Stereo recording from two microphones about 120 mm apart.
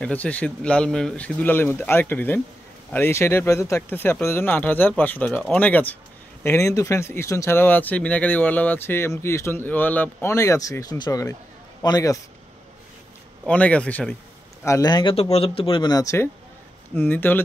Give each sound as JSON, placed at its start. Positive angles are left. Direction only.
{"t": 0.0, "sound": "speech", "side_deg": 10}
{"t": 10.3, "sound": "a man's voice", "side_deg": 25}
{"t": 13.5, "sound": "speech", "side_deg": 10}
{"t": 14.6, "sound": "speech", "side_deg": 25}
{"t": 14.9, "sound": "a man's voice", "side_deg": 40}
{"t": 15.1, "sound": "speech", "side_deg": 55}
{"t": 15.9, "sound": "speech", "side_deg": 30}
{"t": 16.9, "sound": "speech", "side_deg": 15}